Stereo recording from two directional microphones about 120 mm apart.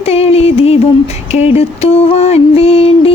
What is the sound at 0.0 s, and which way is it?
Music, 55° left (ahead or behind).